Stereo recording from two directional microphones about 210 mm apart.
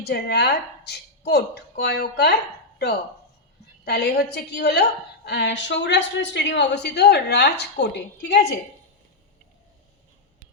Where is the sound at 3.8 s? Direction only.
50° left (ahead or behind).